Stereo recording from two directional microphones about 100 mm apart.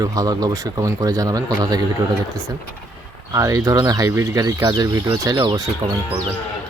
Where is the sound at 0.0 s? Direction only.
40° right (ahead or behind).